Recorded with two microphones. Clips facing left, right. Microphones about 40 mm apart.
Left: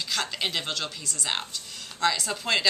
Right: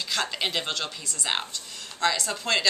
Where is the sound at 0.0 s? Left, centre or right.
Centre.